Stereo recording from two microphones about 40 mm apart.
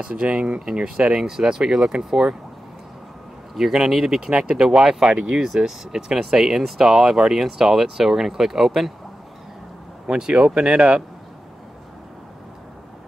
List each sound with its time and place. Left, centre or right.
0.0 s speech: right
1.0 s speech: centre
3.5 s speech: centre
4.3 s speech: right; by 6.9 s centre
6.9 s speech: centre
10.0 s speech: centre